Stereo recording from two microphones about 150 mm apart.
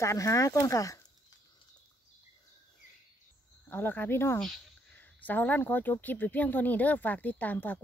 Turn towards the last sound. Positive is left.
turn(degrees=10)  # may be behind; listen again after turning